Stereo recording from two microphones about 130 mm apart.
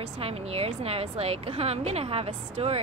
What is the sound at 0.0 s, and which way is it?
A woman's voice, 50° right (ahead or behind).